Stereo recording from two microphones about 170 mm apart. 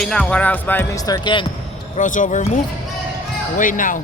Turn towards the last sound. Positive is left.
turn(degrees=50)  # may be behind; listen again after turning